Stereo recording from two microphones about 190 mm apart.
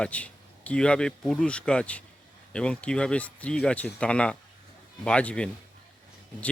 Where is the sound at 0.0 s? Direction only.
5° left (ahead or behind).